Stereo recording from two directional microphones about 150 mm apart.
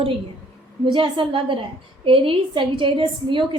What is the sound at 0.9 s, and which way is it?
A woman's voice, 35° right (ahead or behind).